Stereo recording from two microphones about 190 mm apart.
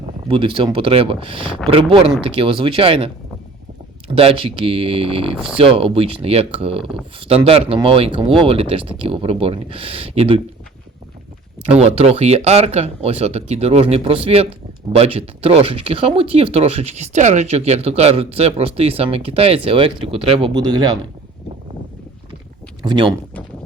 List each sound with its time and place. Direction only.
0.3 s speech: 25° right (ahead or behind)
4.1 s speech: 30° right (ahead or behind)
11.7 s speech: 30° right (ahead or behind)
22.8 s speech: 25° right (ahead or behind)